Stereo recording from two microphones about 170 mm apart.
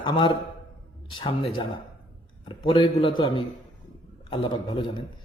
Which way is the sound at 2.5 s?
30° left (ahead or behind).